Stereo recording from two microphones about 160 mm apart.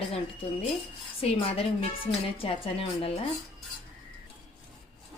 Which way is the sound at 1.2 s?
35° left (ahead or behind).